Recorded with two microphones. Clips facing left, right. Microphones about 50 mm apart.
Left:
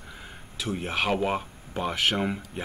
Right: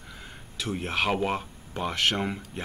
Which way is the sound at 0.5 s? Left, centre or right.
Centre.